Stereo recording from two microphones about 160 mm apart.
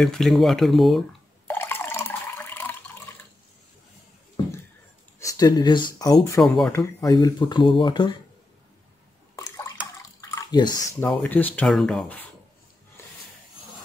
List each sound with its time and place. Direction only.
0.0 s speech: centre (ahead or behind)
1.5 s water: 10° left (ahead or behind)
5.4 s speech: 25° left (ahead or behind)
6.4 s speech: centre (ahead or behind)
6.7 s speech: 20° left (ahead or behind)
9.3 s bathtub: 20° left (ahead or behind)
10.3 s drip: 25° left (ahead or behind)
11.0 s speech: 10° left (ahead or behind)